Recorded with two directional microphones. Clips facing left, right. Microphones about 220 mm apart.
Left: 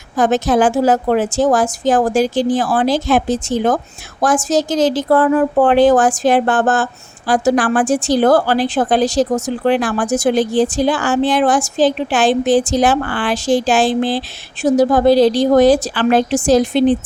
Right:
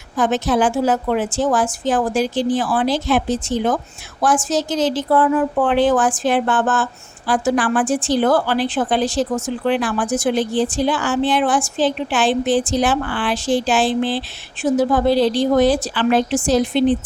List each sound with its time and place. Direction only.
0.2 s a woman's voice: 45° left (ahead or behind)